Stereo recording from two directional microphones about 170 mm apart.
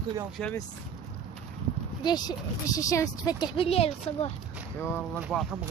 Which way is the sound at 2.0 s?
25° left (ahead or behind).